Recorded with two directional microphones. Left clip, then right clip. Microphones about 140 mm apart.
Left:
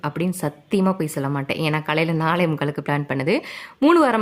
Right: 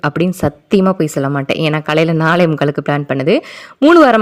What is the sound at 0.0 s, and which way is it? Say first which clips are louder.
A woman's voice: right 10 dB; 40° right (ahead or behind).